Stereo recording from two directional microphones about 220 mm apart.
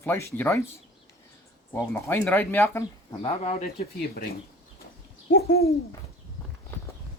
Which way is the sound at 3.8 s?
45° left (ahead or behind).